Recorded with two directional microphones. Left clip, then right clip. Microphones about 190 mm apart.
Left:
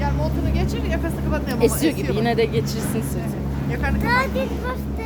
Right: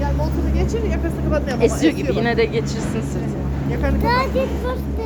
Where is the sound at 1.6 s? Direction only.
15° left (ahead or behind).